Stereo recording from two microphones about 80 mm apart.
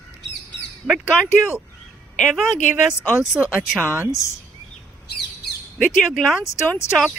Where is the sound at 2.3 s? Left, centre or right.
Centre.